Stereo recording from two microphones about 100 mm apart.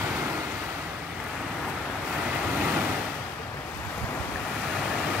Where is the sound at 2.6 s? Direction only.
15° right (ahead or behind).